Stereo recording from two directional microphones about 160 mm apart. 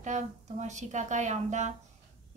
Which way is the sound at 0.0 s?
50° right (ahead or behind).